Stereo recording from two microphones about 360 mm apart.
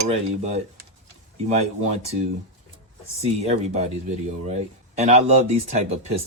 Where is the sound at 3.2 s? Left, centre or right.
Centre.